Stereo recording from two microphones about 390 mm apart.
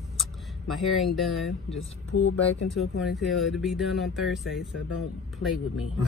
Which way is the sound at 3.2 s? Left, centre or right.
Centre.